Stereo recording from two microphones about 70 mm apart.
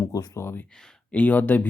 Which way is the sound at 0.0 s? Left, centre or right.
Left.